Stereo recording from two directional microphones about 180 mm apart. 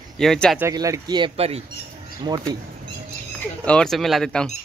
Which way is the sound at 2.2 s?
20° right (ahead or behind).